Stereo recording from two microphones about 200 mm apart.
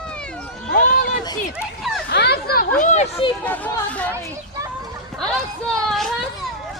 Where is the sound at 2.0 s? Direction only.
55° left (ahead or behind).